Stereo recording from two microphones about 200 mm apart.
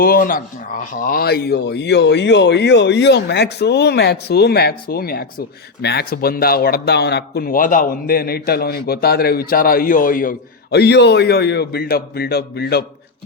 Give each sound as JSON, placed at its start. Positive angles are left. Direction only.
{"t": 0.0, "sound": "a man's voice", "side_deg": 45}